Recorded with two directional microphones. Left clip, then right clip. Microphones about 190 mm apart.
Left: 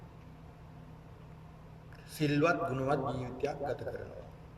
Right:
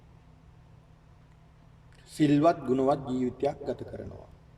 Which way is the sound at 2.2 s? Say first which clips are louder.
Right 6 dB; 45° right (ahead or behind).